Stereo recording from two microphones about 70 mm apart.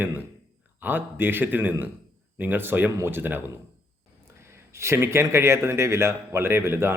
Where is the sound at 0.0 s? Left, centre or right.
Right.